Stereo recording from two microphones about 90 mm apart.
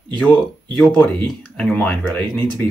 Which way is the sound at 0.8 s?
15° left (ahead or behind).